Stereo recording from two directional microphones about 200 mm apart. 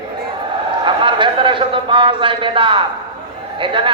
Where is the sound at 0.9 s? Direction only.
25° right (ahead or behind).